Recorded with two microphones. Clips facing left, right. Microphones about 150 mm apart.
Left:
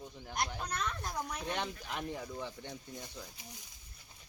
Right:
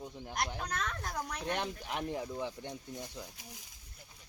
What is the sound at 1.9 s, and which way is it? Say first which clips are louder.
Speech: right 4 dB; 15° right (ahead or behind).